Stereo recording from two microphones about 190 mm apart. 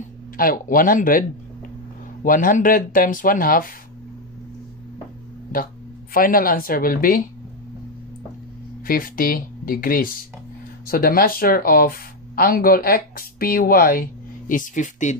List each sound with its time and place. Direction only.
0.4 s speech: 50° left (ahead or behind)
2.2 s speech: 45° left (ahead or behind)
6.1 s speech: 50° left (ahead or behind)
8.8 s speech: 50° left (ahead or behind)